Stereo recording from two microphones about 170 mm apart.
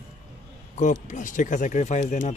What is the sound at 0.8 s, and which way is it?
Speech, 45° left (ahead or behind).